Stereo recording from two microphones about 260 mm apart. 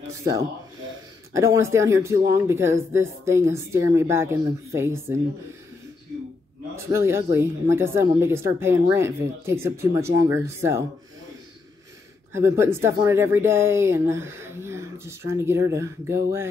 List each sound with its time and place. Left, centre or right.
1.3 s speech: centre
6.7 s speech: centre
12.4 s speech: centre